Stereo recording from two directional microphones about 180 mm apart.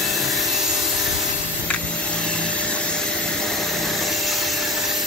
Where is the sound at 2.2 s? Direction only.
5° left (ahead or behind).